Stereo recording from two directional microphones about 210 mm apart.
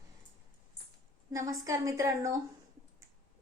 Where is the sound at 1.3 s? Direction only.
15° right (ahead or behind).